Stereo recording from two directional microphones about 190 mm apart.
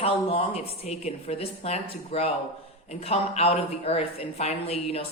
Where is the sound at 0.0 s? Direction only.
30° left (ahead or behind).